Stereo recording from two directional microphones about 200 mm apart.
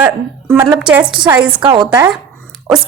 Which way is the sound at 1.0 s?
25° right (ahead or behind).